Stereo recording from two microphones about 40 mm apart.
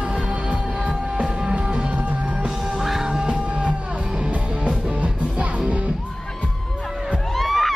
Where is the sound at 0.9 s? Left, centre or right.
Right.